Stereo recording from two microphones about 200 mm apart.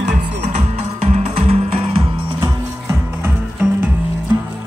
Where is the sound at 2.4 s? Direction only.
10° right (ahead or behind).